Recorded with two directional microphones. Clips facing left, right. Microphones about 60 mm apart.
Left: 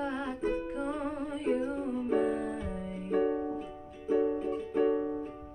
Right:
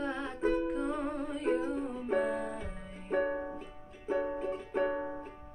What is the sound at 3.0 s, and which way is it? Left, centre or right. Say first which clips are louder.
Music: left 2 dB; centre.